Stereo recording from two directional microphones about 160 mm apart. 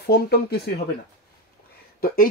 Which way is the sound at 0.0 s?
90° left.